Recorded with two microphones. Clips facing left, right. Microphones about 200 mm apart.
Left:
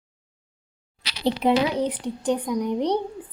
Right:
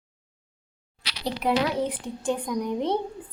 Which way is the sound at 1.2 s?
25° left (ahead or behind).